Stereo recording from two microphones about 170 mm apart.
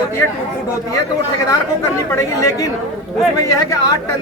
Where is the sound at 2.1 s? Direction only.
20° left (ahead or behind).